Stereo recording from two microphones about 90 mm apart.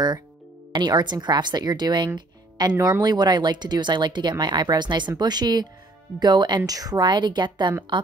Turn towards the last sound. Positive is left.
turn(degrees=-55)  # may be behind; listen again after turning